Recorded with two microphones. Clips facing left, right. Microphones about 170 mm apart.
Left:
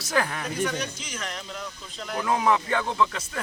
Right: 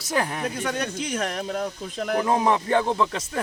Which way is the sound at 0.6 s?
55° right (ahead or behind).